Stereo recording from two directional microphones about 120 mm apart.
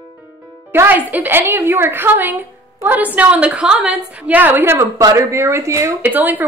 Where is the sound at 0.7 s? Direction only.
20° right (ahead or behind).